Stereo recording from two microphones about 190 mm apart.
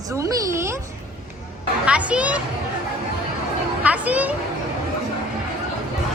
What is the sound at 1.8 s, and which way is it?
Speech, 5° right (ahead or behind).